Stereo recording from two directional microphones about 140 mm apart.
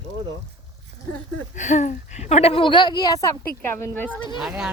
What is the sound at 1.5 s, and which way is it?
A woman's voice, 60° left (ahead or behind).